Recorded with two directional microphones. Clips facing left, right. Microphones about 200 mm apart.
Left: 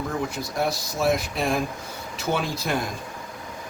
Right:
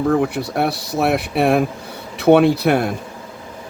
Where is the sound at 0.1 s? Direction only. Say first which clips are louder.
Right 11 dB; 65° right (ahead or behind).